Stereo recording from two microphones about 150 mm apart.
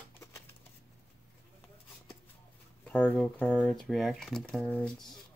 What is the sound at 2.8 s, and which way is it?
Speech, 5° left (ahead or behind).